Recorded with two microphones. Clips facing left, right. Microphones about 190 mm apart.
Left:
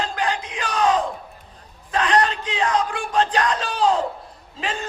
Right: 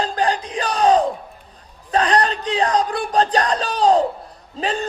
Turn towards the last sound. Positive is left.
turn(degrees=-35)  # may be behind; listen again after turning